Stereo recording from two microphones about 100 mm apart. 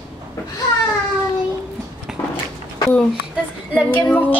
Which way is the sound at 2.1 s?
5° right (ahead or behind).